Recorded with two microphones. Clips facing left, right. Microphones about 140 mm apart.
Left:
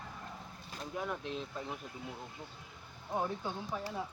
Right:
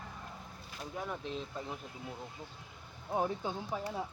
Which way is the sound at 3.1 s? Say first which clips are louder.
Right 2 dB; 15° right (ahead or behind).